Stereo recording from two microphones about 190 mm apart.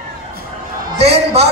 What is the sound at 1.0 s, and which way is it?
Speech, 30° right (ahead or behind).